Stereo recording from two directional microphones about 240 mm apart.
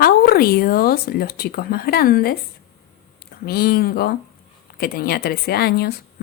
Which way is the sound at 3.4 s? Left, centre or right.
Left.